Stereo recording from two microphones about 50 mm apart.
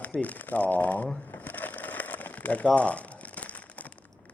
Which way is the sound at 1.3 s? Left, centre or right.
Left.